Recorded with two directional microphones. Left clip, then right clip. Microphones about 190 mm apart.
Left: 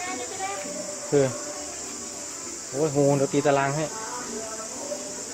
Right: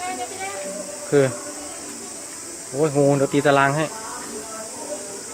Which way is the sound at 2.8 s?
20° right (ahead or behind).